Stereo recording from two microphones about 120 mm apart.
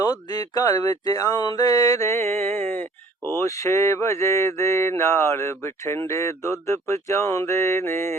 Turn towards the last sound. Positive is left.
turn(degrees=20)  # may be behind; listen again after turning